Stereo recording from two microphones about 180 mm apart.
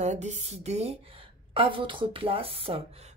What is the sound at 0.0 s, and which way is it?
A woman's voice, 40° right (ahead or behind).